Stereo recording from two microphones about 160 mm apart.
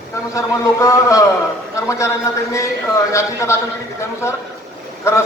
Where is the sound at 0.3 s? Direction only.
20° left (ahead or behind).